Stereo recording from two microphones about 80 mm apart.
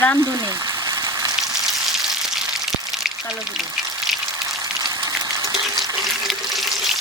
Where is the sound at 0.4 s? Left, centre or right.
Right.